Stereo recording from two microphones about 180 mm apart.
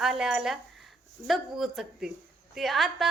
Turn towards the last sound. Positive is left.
turn(degrees=0)  # may be behind; listen again after turning